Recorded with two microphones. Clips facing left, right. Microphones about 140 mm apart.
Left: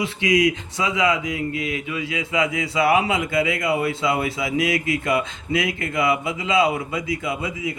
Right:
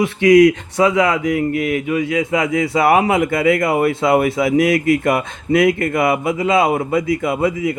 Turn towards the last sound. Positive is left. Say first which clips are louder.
# right 9 dB
turn(degrees=-55)  # may be behind; listen again after turning